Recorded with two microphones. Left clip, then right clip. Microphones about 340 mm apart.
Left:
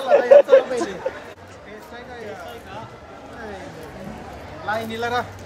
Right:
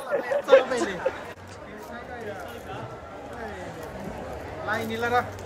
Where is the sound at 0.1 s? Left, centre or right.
Centre.